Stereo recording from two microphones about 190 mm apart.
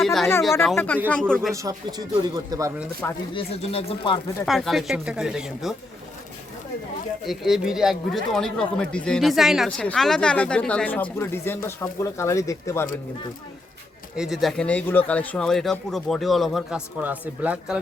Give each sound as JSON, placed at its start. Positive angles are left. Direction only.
{"t": 0.0, "sound": "speech", "side_deg": 0}
{"t": 1.5, "sound": "speech", "side_deg": -20}
{"t": 3.0, "sound": "speech", "side_deg": 10}
{"t": 3.3, "sound": "speech", "side_deg": 30}
{"t": 4.4, "sound": "speech", "side_deg": 0}
{"t": 7.3, "sound": "speech", "side_deg": 0}
{"t": 14.2, "sound": "speech", "side_deg": 0}